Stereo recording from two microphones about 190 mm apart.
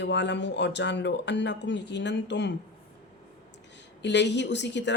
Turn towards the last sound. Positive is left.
turn(degrees=65)  # may be behind; listen again after turning